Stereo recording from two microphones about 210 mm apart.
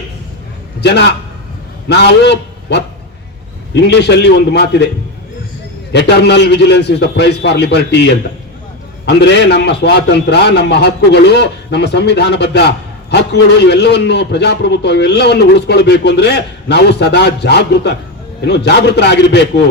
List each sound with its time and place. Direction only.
0.8 s a man's voice: 55° left (ahead or behind)
3.8 s a man's voice: 55° left (ahead or behind)
5.9 s a man's voice: 50° left (ahead or behind)